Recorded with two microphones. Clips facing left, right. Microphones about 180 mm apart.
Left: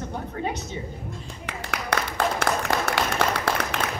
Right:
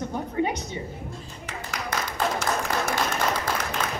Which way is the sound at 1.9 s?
75° left (ahead or behind).